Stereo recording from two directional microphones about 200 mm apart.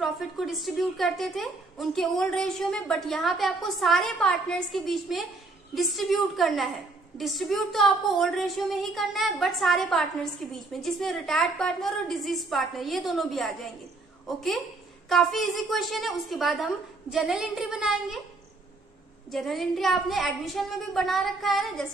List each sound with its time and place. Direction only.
0.0 s a woman's voice: centre (ahead or behind)
19.3 s a woman's voice: centre (ahead or behind)